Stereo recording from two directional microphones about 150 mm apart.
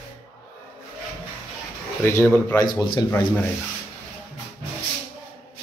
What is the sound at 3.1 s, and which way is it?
Speech, 15° left (ahead or behind).